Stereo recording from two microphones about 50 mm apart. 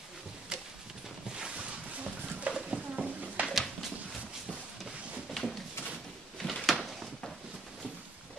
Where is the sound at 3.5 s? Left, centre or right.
Centre.